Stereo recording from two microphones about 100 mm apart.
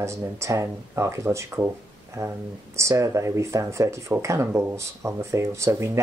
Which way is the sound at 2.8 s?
30° right (ahead or behind).